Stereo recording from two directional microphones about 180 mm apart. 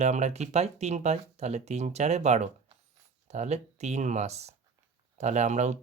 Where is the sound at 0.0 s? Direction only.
40° right (ahead or behind).